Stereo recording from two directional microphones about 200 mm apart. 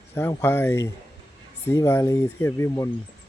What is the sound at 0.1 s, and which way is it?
Speech, 10° left (ahead or behind).